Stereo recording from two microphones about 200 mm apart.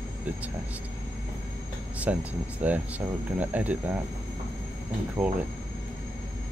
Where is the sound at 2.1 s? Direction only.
5° right (ahead or behind).